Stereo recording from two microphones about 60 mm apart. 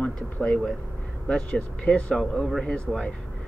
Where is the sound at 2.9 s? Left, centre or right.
Right.